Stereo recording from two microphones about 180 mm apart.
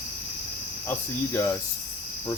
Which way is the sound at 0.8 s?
15° left (ahead or behind).